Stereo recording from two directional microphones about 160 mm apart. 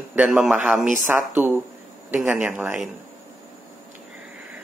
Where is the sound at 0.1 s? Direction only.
5° right (ahead or behind).